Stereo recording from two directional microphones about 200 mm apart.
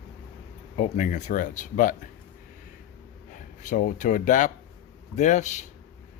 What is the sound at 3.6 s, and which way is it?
Speech, 40° left (ahead or behind).